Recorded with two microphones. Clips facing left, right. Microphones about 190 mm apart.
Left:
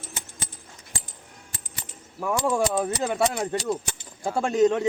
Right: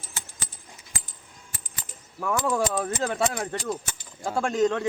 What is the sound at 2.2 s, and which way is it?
Speech, 10° left (ahead or behind).